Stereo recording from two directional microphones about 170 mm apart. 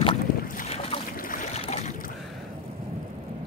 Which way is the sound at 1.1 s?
55° left (ahead or behind).